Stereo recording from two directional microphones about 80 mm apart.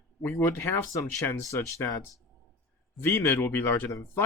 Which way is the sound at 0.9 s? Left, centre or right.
Left.